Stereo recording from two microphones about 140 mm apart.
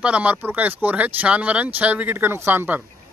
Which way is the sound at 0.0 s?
10° right (ahead or behind).